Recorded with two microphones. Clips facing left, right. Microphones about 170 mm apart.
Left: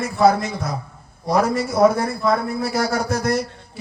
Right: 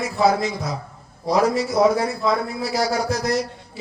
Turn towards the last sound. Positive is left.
turn(degrees=55)  # may be behind; listen again after turning